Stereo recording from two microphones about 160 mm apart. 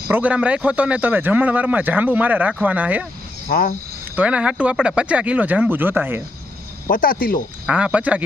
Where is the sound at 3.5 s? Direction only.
65° left (ahead or behind).